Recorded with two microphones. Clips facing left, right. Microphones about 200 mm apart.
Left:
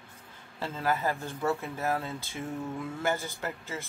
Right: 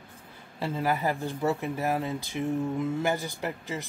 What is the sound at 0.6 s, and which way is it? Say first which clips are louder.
Speech: right 2 dB; 15° right (ahead or behind).